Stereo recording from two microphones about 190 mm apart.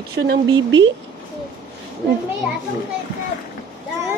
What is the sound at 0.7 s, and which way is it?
Speech, 75° right (ahead or behind).